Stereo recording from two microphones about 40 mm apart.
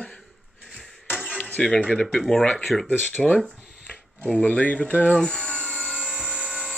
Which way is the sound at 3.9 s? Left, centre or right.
Left.